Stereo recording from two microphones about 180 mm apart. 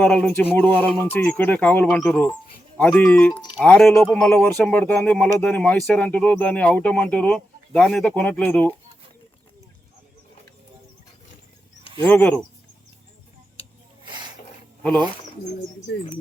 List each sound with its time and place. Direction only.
0.0 s speech: 5° left (ahead or behind)
12.1 s speech: 5° left (ahead or behind)
14.1 s a sound: 25° right (ahead or behind)